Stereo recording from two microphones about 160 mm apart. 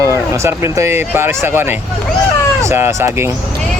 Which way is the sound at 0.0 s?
20° right (ahead or behind).